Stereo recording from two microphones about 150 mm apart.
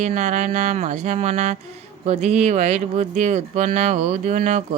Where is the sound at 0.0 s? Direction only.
50° right (ahead or behind).